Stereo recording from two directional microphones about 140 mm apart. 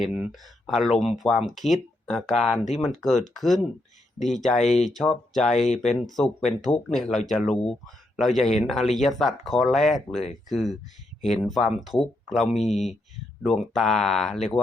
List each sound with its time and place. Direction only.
0.0 s speech: 5° right (ahead or behind)
5.5 s speech: 55° left (ahead or behind)
5.8 s speech: centre (ahead or behind)